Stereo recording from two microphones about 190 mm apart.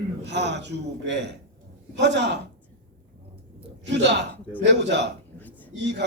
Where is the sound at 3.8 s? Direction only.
65° right (ahead or behind).